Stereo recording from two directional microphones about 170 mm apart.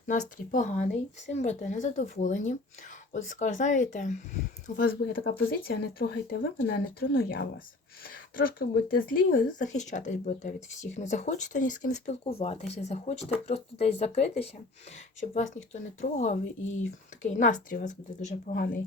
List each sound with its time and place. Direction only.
0.1 s speech: 45° left (ahead or behind)
4.8 s speech: 60° left (ahead or behind)
12.3 s speech: 35° left (ahead or behind)